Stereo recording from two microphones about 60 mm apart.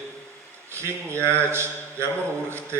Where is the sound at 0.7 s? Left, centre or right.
Right.